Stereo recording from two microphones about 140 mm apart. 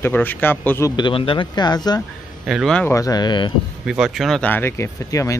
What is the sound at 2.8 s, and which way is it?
Speech, 20° left (ahead or behind).